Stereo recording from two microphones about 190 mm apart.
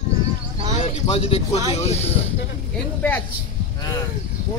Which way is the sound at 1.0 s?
30° left (ahead or behind).